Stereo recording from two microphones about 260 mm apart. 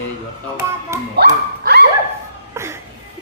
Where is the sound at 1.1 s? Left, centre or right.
Right.